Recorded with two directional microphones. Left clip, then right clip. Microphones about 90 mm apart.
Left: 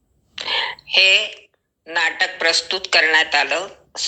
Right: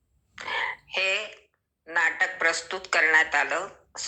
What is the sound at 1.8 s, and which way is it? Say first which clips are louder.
A woman's voice: left 5 dB; 25° left (ahead or behind).